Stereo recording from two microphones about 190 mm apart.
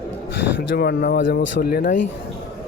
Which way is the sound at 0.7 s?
55° left (ahead or behind).